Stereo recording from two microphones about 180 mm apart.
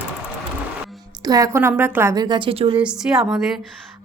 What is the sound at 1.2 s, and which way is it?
Speech, 20° right (ahead or behind).